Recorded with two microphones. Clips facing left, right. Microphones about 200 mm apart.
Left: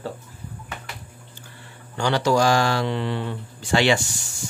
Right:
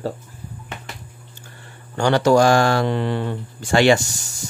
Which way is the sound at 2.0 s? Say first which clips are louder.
Right 5 dB; 50° right (ahead or behind).